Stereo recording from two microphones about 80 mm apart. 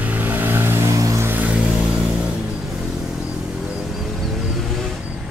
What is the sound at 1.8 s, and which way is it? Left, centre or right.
Vehicle, centre.